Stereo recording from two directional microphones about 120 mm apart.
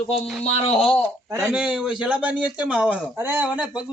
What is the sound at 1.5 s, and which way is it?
Speech, 5° right (ahead or behind).